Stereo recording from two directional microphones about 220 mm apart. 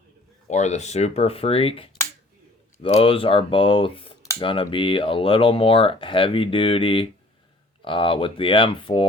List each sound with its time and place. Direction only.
0.4 s speech: 30° left (ahead or behind)